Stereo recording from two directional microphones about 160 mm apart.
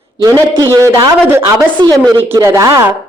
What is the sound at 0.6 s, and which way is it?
A woman's voice, 20° right (ahead or behind).